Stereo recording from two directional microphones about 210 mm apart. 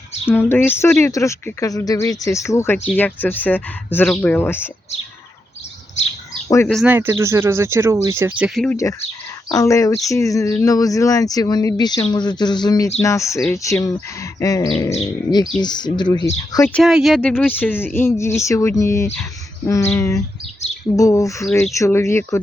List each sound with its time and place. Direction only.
0.3 s speech: 10° left (ahead or behind)
6.5 s speech: 10° left (ahead or behind)
6.7 s speech: 5° right (ahead or behind)
8.7 s speech: 15° left (ahead or behind)